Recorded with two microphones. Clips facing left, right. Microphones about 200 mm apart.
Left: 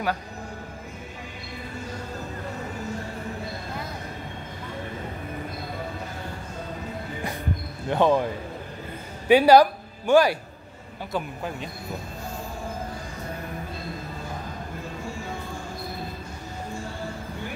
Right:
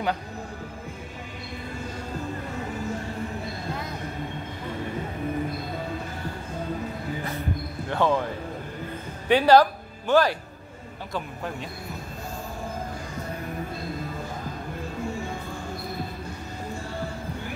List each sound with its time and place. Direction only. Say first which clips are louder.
7.9 s speech: left 3 dB; 15° left (ahead or behind)
9.3 s speech: left 2 dB; 10° left (ahead or behind)